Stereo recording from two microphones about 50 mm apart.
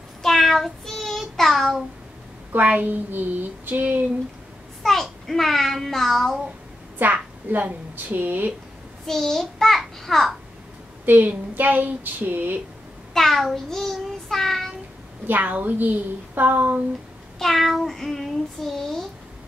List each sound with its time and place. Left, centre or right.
0.2 s child singing: centre
2.6 s a woman's voice: right
4.8 s a child's voice: centre
7.0 s a woman's voice: right
9.0 s a child's voice: centre
9.8 s child singing: centre
11.1 s a woman's voice: right
13.1 s a child's voice: centre
13.7 s child singing: centre
15.2 s a woman's voice: right
17.4 s child singing: centre